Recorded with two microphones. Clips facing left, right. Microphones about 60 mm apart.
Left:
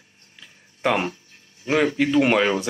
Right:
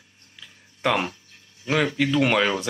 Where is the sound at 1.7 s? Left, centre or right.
Centre.